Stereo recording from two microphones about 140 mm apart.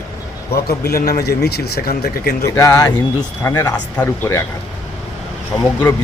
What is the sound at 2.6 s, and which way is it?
Speech, 25° left (ahead or behind).